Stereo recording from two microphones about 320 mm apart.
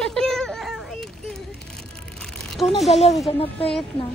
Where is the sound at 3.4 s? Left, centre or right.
Centre.